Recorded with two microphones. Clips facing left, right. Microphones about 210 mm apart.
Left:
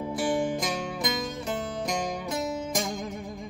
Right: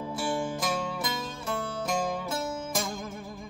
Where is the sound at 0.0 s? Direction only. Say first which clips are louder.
Left 4 dB; 20° left (ahead or behind).